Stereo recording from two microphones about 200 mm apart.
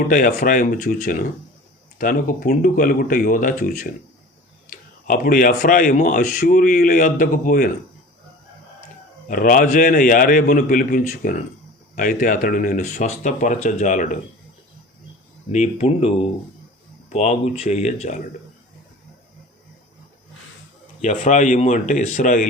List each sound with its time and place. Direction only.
0.1 s speech: 40° left (ahead or behind)
9.3 s speech: 45° left (ahead or behind)
15.5 s speech: 35° left (ahead or behind)
21.0 s speech: 40° left (ahead or behind)